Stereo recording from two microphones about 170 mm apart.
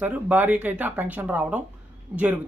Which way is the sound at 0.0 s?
10° right (ahead or behind).